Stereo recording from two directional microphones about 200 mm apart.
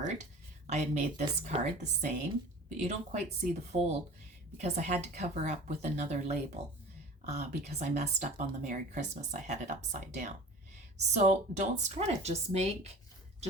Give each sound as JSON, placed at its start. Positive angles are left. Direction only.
{"t": 0.0, "sound": "speech", "side_deg": -35}